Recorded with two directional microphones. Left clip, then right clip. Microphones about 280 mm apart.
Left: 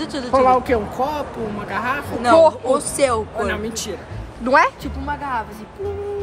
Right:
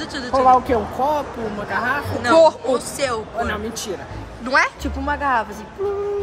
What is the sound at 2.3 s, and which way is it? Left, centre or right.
Speech, centre.